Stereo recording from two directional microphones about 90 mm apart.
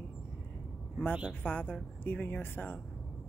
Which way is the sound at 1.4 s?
15° left (ahead or behind).